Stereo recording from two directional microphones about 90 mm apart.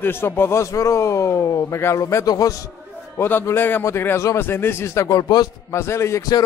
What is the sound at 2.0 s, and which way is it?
Speech, 45° left (ahead or behind).